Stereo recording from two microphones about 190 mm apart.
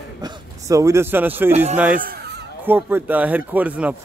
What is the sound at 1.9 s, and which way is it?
Fowl, 55° right (ahead or behind).